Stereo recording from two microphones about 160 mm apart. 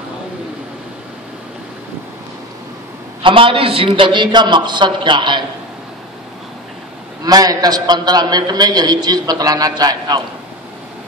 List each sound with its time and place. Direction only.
3.2 s a man's voice: 35° right (ahead or behind)
7.2 s a man's voice: 25° right (ahead or behind)